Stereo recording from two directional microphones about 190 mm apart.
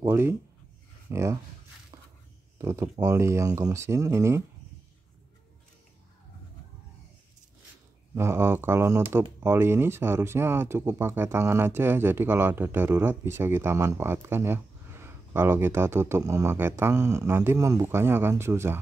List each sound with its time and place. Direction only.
0.0 s speech: 15° right (ahead or behind)
2.6 s speech: 15° right (ahead or behind)
8.1 s speech: 15° right (ahead or behind)